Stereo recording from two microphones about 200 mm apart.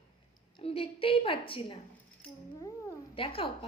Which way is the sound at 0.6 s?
30° left (ahead or behind).